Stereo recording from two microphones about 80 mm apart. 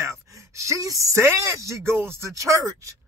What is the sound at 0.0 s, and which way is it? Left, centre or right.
Speech, right.